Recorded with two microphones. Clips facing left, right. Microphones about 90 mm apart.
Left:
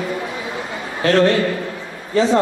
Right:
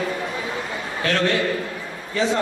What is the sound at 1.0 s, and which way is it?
A man's voice, 35° left (ahead or behind).